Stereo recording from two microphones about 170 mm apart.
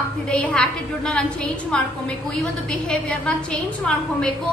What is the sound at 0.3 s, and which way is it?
A woman's voice, 5° left (ahead or behind).